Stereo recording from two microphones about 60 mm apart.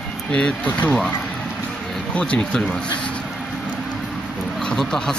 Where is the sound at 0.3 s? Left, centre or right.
Centre.